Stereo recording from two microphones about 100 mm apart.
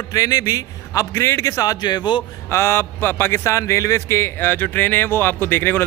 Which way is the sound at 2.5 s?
25° left (ahead or behind).